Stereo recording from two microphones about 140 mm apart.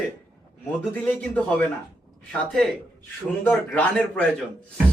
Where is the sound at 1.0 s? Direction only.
10° left (ahead or behind).